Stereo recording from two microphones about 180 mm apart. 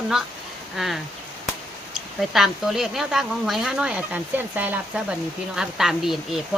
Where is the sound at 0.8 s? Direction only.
5° right (ahead or behind).